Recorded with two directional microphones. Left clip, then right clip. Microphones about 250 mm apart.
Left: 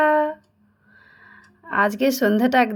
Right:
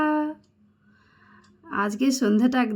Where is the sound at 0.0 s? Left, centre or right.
Centre.